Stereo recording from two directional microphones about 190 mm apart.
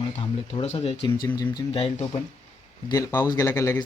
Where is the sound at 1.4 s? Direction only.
20° left (ahead or behind).